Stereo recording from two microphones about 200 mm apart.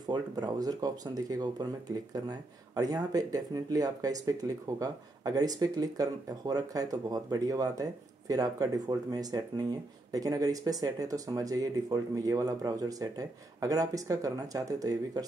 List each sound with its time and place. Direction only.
0.0 s speech: 20° right (ahead or behind)